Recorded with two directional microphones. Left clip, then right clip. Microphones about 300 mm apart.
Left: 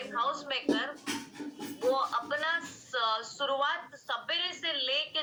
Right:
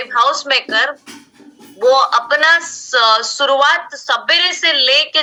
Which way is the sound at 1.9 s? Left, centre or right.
Right.